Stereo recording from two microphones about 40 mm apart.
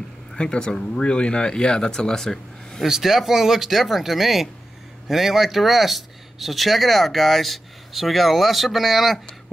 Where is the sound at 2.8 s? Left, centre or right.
Centre.